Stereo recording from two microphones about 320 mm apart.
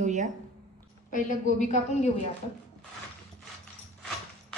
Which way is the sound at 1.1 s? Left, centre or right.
Left.